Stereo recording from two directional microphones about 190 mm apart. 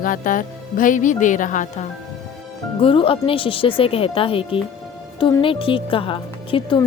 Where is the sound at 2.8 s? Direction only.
30° left (ahead or behind).